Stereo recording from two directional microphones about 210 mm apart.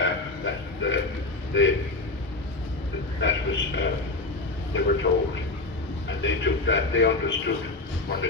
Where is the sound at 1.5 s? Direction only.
65° left (ahead or behind).